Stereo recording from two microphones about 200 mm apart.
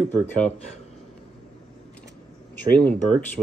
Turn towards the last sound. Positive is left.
turn(degrees=5)  # may be behind; listen again after turning